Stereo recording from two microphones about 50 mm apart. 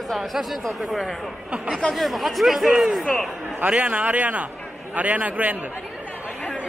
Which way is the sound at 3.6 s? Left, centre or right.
Right.